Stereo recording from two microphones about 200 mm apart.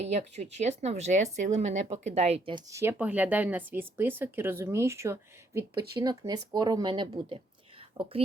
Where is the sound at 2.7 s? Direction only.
15° right (ahead or behind).